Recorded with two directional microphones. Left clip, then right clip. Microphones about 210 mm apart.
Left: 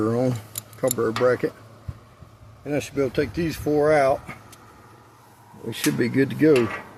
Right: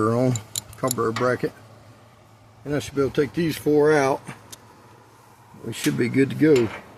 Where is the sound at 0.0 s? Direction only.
40° right (ahead or behind).